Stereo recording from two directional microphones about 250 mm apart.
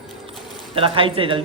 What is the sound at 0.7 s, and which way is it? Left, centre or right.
Speech, right.